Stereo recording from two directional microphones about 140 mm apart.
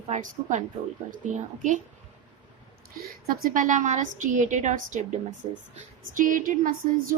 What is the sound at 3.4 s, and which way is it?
A woman's voice, 75° right (ahead or behind).